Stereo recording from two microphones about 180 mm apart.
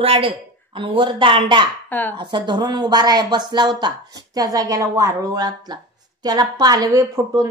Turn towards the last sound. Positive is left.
turn(degrees=-20)  # may be behind; listen again after turning